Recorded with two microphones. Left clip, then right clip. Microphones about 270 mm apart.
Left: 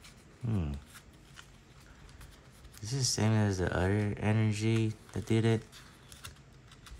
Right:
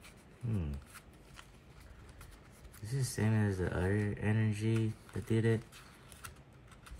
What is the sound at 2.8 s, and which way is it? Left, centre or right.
Speech, centre.